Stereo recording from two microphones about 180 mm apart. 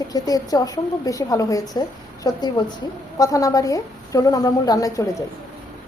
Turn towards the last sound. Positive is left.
turn(degrees=20)  # may be behind; listen again after turning